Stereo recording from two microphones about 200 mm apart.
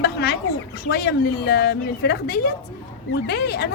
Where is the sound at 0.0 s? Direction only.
50° left (ahead or behind).